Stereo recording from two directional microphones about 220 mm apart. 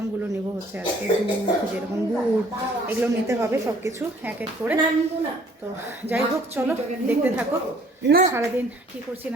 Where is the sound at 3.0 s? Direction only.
10° right (ahead or behind).